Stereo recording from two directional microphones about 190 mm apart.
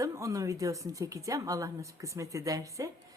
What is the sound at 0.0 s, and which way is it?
A woman's voice, 15° right (ahead or behind).